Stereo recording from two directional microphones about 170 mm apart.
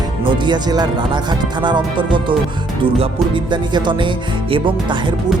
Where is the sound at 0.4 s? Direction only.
25° right (ahead or behind).